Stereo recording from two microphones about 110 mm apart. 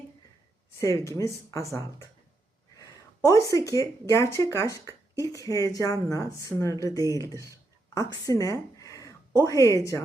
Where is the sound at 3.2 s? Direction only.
30° left (ahead or behind).